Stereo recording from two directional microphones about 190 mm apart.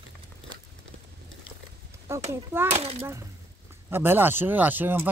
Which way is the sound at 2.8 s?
30° right (ahead or behind).